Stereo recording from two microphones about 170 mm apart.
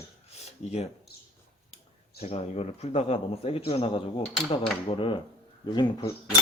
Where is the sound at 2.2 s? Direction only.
35° left (ahead or behind).